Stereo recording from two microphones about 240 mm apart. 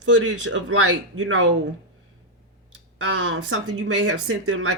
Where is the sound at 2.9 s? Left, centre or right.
Right.